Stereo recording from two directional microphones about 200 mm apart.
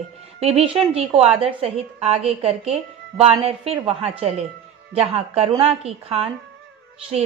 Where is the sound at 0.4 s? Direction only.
30° right (ahead or behind).